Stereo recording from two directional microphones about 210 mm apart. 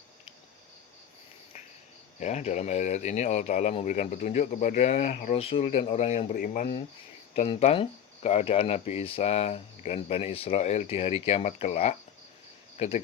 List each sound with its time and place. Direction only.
2.1 s speech: 35° left (ahead or behind)
7.3 s speech: 25° left (ahead or behind)